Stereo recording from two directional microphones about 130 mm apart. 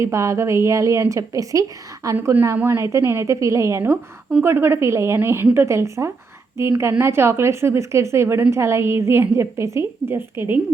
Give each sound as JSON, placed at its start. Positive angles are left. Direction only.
{"t": 0.0, "sound": "a woman's voice", "side_deg": -25}